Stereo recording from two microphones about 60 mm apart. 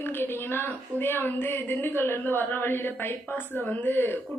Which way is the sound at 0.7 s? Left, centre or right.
Left.